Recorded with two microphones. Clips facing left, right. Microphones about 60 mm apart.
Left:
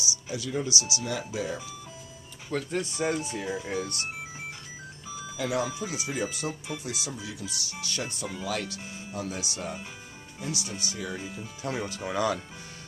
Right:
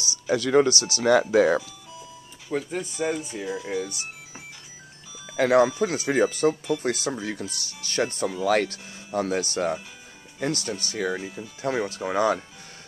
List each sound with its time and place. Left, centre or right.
0.0 s speech: right
2.5 s speech: centre
5.3 s speech: right
11.6 s speech: right